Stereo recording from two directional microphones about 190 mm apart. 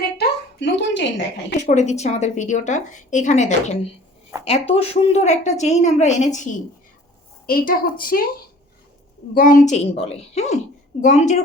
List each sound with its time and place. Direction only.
0.2 s a sound: 65° left (ahead or behind)
1.5 s a woman's voice: 40° left (ahead or behind)
7.4 s a woman's voice: 50° left (ahead or behind)
9.3 s a woman's voice: 45° left (ahead or behind)